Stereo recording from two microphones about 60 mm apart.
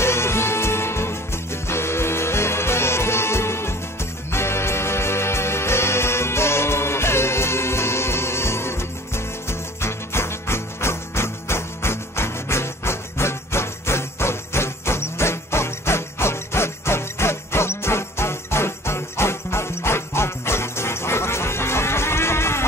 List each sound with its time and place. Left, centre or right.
0.0 s music: left